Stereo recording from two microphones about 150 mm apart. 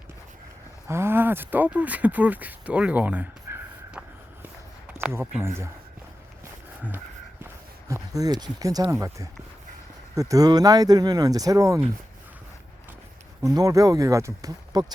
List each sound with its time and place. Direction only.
0.9 s speech: 15° right (ahead or behind)
7.9 s speech: 20° right (ahead or behind)
13.4 s speech: 25° right (ahead or behind)